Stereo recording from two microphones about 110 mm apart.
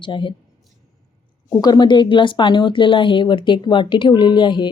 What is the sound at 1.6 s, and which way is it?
Speech, 40° left (ahead or behind).